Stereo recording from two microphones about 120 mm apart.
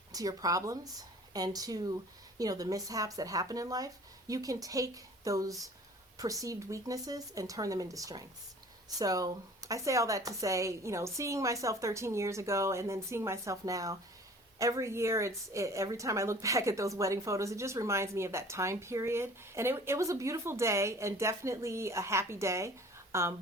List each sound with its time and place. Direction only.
0.1 s a woman's voice: 30° right (ahead or behind)